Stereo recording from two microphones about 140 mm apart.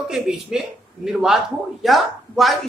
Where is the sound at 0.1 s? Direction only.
5° right (ahead or behind).